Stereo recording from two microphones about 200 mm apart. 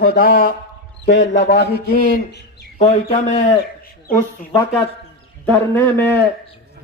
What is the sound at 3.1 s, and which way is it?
Speech, 40° left (ahead or behind).